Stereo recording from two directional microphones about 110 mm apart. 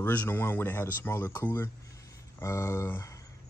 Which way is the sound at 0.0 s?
15° left (ahead or behind).